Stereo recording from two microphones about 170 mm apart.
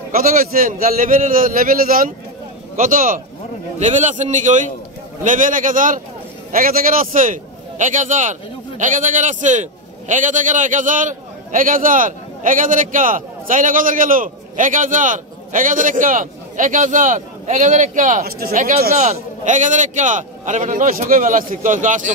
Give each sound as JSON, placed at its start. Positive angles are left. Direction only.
{"t": 0.1, "sound": "a man's voice", "side_deg": -55}
{"t": 18.2, "sound": "a man's voice", "side_deg": -55}
{"t": 18.9, "sound": "a man's voice", "side_deg": -45}